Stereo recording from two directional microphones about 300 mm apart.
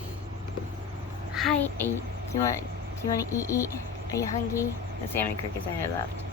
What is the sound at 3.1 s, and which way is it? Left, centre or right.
Speech, centre.